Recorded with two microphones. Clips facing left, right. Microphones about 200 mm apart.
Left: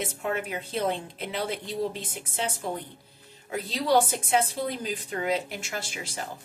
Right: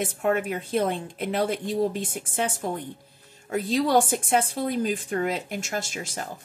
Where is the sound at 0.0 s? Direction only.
50° right (ahead or behind).